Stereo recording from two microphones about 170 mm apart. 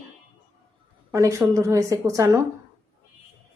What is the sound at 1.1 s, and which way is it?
A woman's voice, 20° right (ahead or behind).